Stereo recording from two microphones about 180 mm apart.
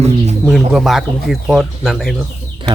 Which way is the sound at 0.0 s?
35° right (ahead or behind).